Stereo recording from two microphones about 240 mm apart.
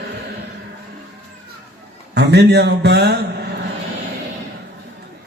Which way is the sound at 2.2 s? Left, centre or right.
Right.